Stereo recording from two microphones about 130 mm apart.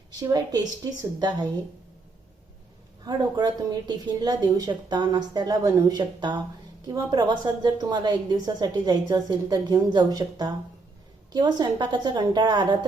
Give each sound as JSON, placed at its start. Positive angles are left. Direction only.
{"t": 0.1, "sound": "a woman's voice", "side_deg": -30}
{"t": 3.0, "sound": "a woman's voice", "side_deg": -35}